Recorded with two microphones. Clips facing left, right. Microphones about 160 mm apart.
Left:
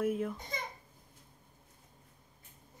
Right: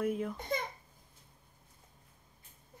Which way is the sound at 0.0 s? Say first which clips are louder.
Left 1 dB; centre (ahead or behind).